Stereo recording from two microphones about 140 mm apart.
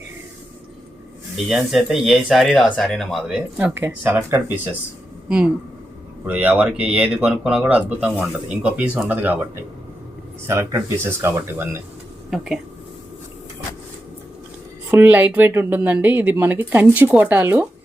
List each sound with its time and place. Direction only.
1.5 s speech: 5° right (ahead or behind)
6.2 s speech: 10° right (ahead or behind)
12.3 s speech: centre (ahead or behind)
14.8 s speech: 15° right (ahead or behind)